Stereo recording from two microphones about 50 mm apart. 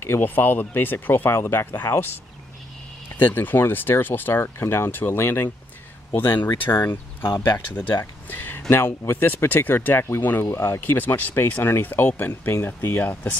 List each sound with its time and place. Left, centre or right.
0.2 s speech: left
3.2 s speech: left
6.1 s speech: left
7.3 s speech: left
8.3 s speech: left
10.4 s speech: left
10.8 s speech: left